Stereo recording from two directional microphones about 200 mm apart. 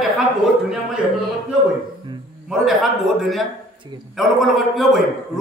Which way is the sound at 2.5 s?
Centre (ahead or behind).